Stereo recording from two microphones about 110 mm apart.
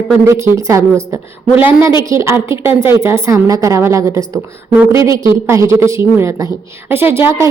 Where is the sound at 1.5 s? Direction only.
15° right (ahead or behind).